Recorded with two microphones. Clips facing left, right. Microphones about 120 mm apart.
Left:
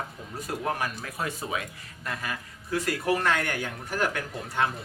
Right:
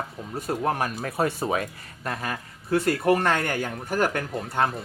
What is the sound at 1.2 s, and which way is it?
Speech, 50° right (ahead or behind).